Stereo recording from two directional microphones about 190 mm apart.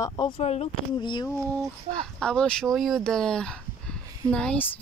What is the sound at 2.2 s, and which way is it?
Speech, 5° left (ahead or behind).